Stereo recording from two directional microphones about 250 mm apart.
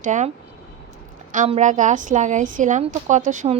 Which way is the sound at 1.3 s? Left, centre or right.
Right.